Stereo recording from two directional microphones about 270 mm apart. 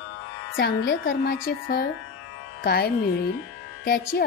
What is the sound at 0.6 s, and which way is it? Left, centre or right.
Speech, left.